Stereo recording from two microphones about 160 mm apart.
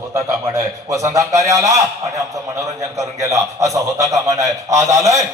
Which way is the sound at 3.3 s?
20° right (ahead or behind).